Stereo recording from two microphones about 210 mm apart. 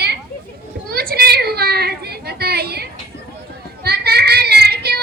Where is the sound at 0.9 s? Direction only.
45° right (ahead or behind).